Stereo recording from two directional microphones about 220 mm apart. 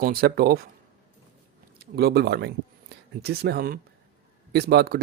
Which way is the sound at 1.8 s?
45° right (ahead or behind).